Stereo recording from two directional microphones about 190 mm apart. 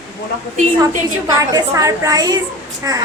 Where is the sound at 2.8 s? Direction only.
15° right (ahead or behind).